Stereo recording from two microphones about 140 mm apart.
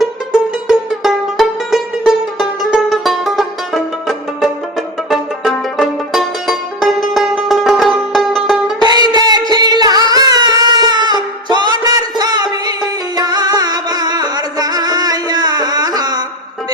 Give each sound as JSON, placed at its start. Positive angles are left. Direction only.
{"t": 0.7, "sound": "music", "side_deg": 0}
{"t": 5.1, "sound": "music", "side_deg": 0}
{"t": 8.8, "sound": "music", "side_deg": -30}